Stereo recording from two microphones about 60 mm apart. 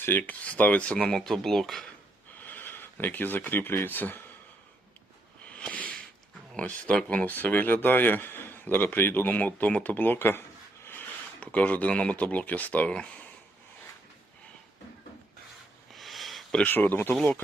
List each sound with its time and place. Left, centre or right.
0.2 s speech: left
0.9 s speech: centre
2.4 s speech: left
5.5 s a sound: centre
6.6 s speech: left
11.3 s speech: left
15.9 s a sound: centre
16.6 s speech: left